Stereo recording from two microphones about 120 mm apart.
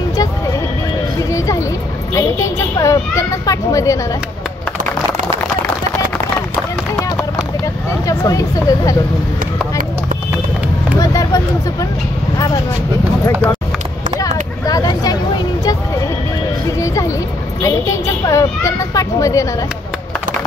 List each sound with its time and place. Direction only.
2.1 s a woman's voice: 25° left (ahead or behind)
7.6 s vehicle: 25° left (ahead or behind)
11.0 s speech: 30° left (ahead or behind)
13.2 s a woman's voice: 20° left (ahead or behind)
14.7 s a sound: 30° left (ahead or behind)
17.6 s a woman's voice: 25° left (ahead or behind)